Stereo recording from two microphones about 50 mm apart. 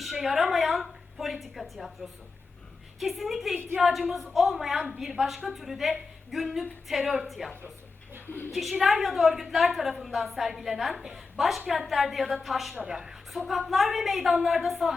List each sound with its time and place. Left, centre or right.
0.0 s a woman's voice: centre
8.8 s a woman's voice: centre